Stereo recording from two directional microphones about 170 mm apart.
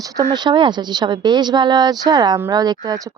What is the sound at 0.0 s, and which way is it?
Speech, 25° right (ahead or behind).